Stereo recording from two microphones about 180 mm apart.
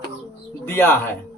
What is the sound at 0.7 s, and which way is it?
Speech, 15° left (ahead or behind).